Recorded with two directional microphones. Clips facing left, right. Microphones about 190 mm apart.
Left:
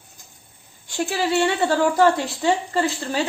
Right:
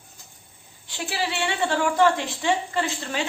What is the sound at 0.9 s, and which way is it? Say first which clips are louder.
A woman's voice: left 6 dB; 45° left (ahead or behind).